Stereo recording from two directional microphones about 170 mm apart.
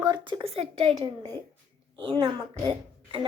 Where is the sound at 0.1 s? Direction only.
30° right (ahead or behind).